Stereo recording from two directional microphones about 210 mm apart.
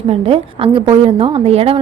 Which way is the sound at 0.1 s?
30° right (ahead or behind).